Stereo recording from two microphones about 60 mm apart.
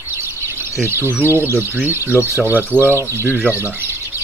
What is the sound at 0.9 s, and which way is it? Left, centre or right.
Speech, right.